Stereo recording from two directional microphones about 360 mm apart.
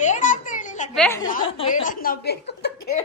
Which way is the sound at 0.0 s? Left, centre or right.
Left.